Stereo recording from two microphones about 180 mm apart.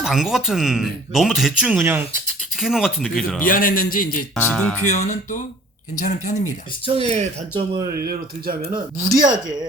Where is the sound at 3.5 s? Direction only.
50° left (ahead or behind).